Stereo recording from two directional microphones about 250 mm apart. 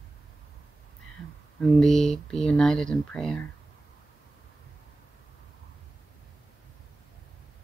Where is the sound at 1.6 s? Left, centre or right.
Centre.